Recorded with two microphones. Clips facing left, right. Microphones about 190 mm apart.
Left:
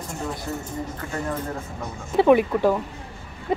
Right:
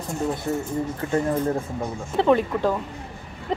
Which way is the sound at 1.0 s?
25° right (ahead or behind).